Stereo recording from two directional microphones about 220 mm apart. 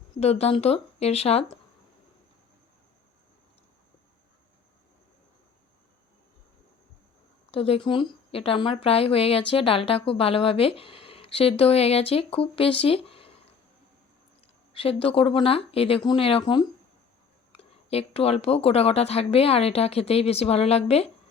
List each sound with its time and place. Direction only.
0.2 s a woman's voice: 30° left (ahead or behind)
7.5 s a woman's voice: 25° left (ahead or behind)
14.7 s a woman's voice: 25° left (ahead or behind)